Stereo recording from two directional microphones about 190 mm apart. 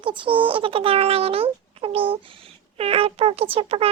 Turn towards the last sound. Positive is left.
turn(degrees=-30)  # may be behind; listen again after turning